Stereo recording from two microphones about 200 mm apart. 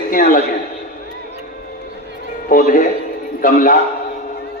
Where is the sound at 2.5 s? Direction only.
45° left (ahead or behind).